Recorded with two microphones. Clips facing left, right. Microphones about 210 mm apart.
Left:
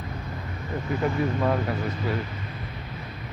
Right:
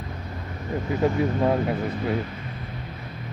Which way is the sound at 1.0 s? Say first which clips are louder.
Right 3 dB; 25° right (ahead or behind).